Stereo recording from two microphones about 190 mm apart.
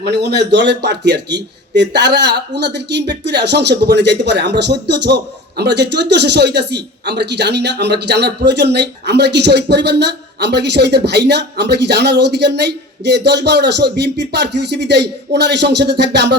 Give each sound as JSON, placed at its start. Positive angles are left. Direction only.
{"t": 0.0, "sound": "a man's voice", "side_deg": -60}